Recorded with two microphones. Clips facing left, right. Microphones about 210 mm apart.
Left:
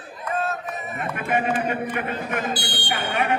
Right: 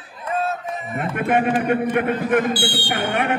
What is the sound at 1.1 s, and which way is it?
A man's voice, 50° right (ahead or behind).